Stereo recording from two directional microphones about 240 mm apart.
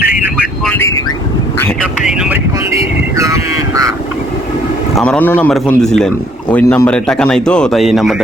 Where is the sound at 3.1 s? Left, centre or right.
Centre.